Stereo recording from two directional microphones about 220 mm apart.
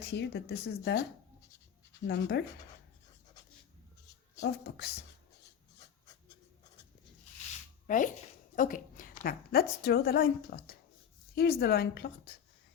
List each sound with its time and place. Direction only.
0.0 s a woman's voice: 50° left (ahead or behind)
2.0 s a woman's voice: 50° left (ahead or behind)
4.4 s a woman's voice: 50° left (ahead or behind)
7.9 s a woman's voice: 35° left (ahead or behind)